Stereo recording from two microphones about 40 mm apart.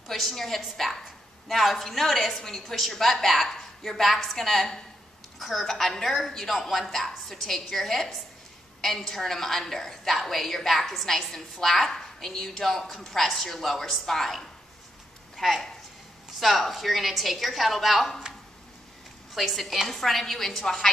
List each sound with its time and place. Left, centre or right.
0.1 s a woman's voice: centre
5.7 s a woman's voice: centre
19.3 s a woman's voice: centre